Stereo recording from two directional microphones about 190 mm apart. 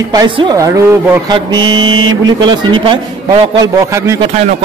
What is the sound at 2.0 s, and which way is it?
Speech, 85° right.